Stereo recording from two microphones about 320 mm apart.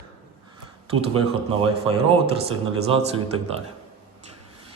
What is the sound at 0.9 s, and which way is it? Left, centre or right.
A man's voice, centre.